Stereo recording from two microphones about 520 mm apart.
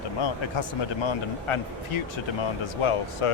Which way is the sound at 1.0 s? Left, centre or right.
Left.